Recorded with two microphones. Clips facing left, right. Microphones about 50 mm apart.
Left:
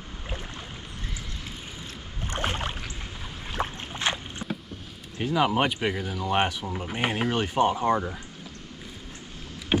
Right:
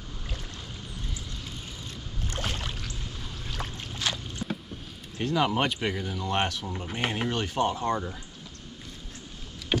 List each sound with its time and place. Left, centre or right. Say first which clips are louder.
2.3 s rowboat: left 5 dB; left
3.5 s boat: left 7 dB; left
5.1 s speech: left 2 dB; centre
9.7 s boat: left 3 dB; left